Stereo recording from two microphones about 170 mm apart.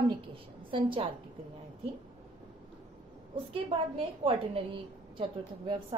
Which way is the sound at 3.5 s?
35° right (ahead or behind).